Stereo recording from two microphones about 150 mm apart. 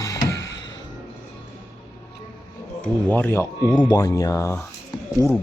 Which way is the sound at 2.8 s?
10° left (ahead or behind).